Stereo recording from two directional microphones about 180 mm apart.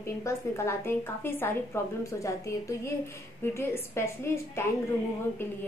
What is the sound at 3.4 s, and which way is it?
A woman's voice, 15° left (ahead or behind).